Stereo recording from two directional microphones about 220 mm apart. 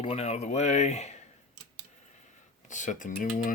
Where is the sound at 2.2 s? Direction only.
35° left (ahead or behind).